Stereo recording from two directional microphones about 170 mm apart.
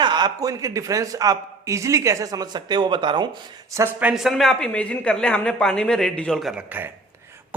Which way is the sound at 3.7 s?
15° right (ahead or behind).